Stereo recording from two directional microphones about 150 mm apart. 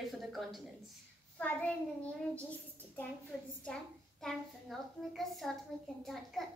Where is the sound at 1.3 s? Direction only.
10° left (ahead or behind).